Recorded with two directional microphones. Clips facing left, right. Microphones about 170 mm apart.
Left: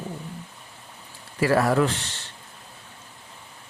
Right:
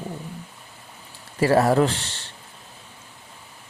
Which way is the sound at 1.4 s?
30° right (ahead or behind).